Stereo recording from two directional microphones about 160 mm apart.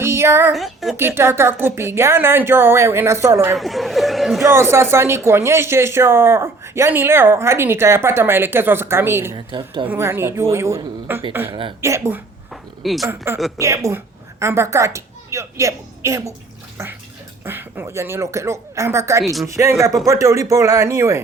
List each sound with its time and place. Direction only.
0.0 s a sound: 15° right (ahead or behind)
0.5 s a woman's voice: centre (ahead or behind)
0.9 s a woman's voice: 15° right (ahead or behind)
3.6 s speech: centre (ahead or behind)
4.4 s a woman's voice: 15° right (ahead or behind)
9.3 s speech: 30° right (ahead or behind)
9.8 s a woman's voice: 15° right (ahead or behind)
12.8 s a woman's voice: centre (ahead or behind)
13.1 s a woman's voice: 15° right (ahead or behind)
17.4 s a woman's voice: 15° right (ahead or behind)
19.2 s speech: centre (ahead or behind)
19.5 s speech: 20° right (ahead or behind)